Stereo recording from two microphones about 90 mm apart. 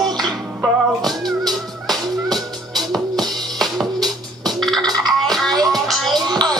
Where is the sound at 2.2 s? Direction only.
50° right (ahead or behind).